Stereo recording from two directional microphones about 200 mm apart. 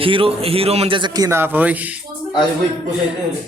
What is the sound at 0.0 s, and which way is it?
Speech, 25° right (ahead or behind).